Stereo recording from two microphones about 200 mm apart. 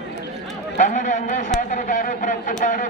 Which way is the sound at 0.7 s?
40° left (ahead or behind).